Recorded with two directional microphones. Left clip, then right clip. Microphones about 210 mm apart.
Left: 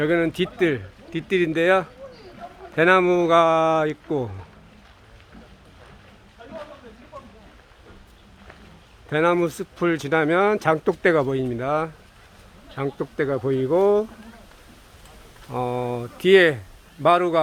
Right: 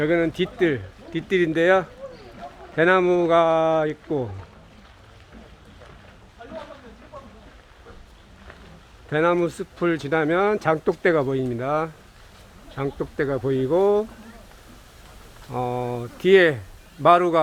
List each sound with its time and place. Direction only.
0.0 s speech: 15° left (ahead or behind)
9.0 s speech: 10° left (ahead or behind)
15.4 s speech: 10° left (ahead or behind)